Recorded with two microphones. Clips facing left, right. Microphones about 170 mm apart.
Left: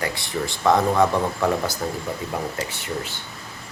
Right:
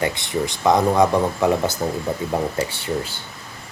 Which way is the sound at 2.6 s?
30° right (ahead or behind).